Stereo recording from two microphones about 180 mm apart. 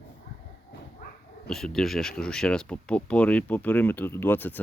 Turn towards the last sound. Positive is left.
turn(degrees=10)  # may be behind; listen again after turning